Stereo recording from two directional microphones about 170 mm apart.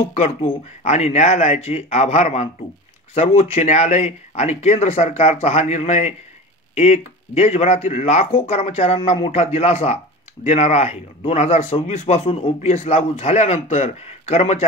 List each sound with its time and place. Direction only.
0.1 s speech: 45° left (ahead or behind)